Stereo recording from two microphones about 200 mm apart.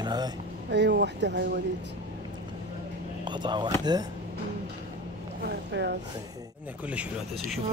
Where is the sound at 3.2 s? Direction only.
20° right (ahead or behind).